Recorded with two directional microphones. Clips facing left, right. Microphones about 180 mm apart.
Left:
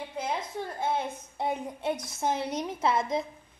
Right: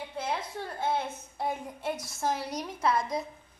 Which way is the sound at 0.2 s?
15° left (ahead or behind).